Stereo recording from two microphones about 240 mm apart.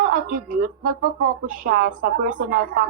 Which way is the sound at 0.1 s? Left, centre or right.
Right.